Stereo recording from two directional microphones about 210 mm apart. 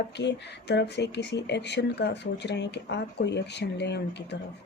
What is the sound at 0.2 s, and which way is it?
Speech, 55° left (ahead or behind).